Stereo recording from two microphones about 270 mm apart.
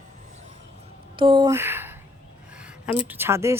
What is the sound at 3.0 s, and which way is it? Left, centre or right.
Speech, centre.